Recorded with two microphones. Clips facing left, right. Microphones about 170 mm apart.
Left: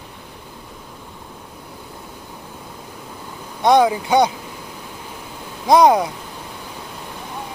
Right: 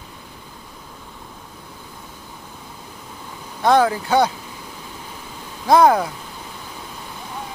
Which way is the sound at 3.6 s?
15° left (ahead or behind).